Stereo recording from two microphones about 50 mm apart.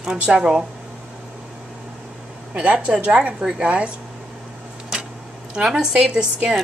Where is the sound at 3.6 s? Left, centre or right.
Right.